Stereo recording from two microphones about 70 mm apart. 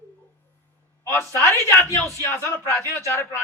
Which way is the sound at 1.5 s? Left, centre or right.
Left.